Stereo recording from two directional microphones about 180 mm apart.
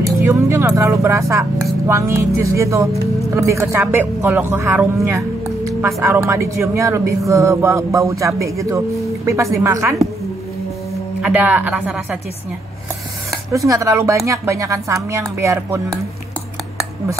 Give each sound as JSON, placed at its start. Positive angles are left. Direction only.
{"t": 0.0, "sound": "speech", "side_deg": -15}
{"t": 6.0, "sound": "speech", "side_deg": -15}
{"t": 11.1, "sound": "speech", "side_deg": -10}
{"t": 13.5, "sound": "speech", "side_deg": -15}